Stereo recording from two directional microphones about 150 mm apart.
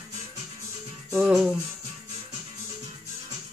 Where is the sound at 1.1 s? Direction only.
Centre (ahead or behind).